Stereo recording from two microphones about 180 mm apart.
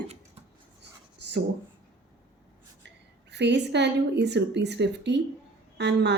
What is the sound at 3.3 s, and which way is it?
Speech, 70° right (ahead or behind).